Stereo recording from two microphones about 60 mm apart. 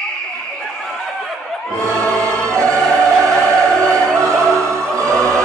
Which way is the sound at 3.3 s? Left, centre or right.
Centre.